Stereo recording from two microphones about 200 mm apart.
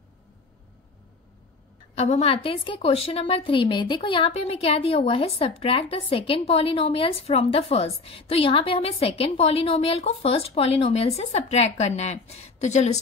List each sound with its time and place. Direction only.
2.0 s a woman's voice: 30° left (ahead or behind)